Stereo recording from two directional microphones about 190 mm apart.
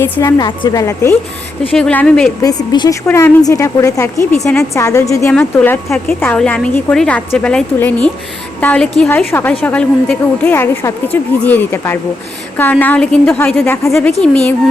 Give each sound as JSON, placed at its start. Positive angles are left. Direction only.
{"t": 0.0, "sound": "a woman's voice", "side_deg": 15}
{"t": 1.7, "sound": "a woman's voice", "side_deg": 5}
{"t": 2.4, "sound": "a woman's voice", "side_deg": 20}